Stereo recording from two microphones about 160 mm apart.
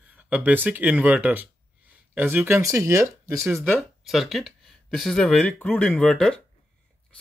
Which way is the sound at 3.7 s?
Centre (ahead or behind).